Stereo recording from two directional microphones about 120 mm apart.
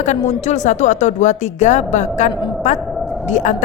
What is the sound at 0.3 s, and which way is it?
Speech, 75° left (ahead or behind).